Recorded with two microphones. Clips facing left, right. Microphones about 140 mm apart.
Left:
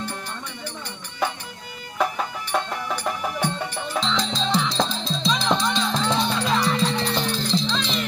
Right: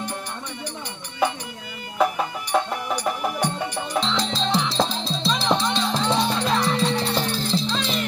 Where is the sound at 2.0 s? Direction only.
10° right (ahead or behind).